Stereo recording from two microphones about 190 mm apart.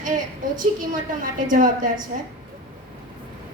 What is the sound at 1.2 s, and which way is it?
Speech, 45° right (ahead or behind).